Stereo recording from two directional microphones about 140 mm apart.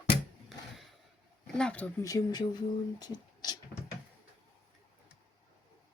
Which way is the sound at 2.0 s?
25° left (ahead or behind).